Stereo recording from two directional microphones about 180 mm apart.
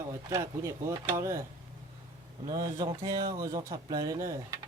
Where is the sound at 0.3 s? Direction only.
15° right (ahead or behind).